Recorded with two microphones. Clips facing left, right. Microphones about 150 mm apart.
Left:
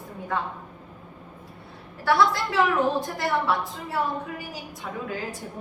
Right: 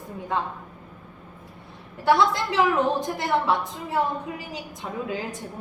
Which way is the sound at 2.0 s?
20° right (ahead or behind).